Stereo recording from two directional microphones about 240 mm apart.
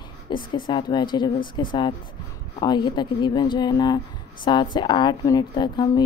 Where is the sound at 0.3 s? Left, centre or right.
Centre.